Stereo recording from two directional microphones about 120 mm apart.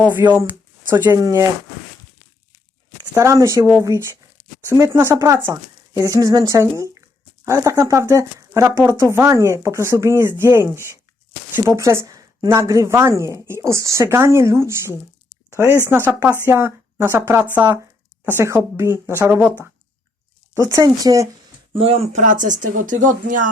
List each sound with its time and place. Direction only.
0.0 s speech: 15° right (ahead or behind)
1.1 s speech: 25° right (ahead or behind)
3.2 s speech: 25° right (ahead or behind)
20.7 s speech: 35° right (ahead or behind)
21.7 s speech: 50° right (ahead or behind)
22.1 s speech: 90° right